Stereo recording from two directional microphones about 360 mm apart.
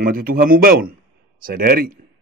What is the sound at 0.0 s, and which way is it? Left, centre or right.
Speech, right.